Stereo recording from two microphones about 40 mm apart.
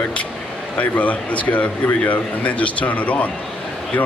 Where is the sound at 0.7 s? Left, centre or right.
Left.